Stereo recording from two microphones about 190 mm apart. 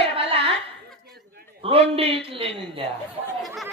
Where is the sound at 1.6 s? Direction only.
30° right (ahead or behind).